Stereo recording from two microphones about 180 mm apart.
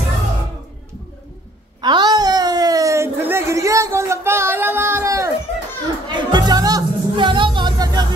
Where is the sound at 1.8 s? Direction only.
25° right (ahead or behind).